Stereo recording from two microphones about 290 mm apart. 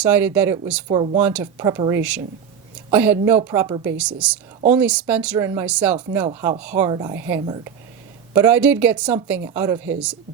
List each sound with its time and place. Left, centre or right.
0.0 s speech: centre
0.9 s speech: centre
1.2 s speech: centre